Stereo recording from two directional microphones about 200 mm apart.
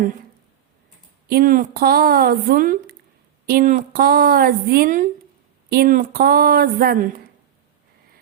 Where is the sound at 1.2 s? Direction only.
45° right (ahead or behind).